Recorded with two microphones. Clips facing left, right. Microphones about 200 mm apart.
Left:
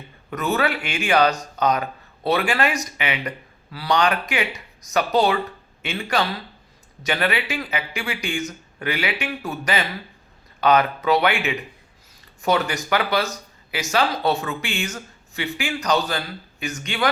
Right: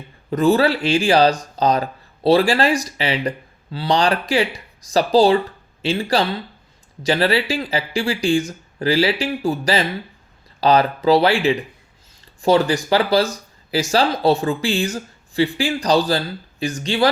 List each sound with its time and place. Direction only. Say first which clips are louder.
0.3 s speech: right 7 dB; 30° right (ahead or behind)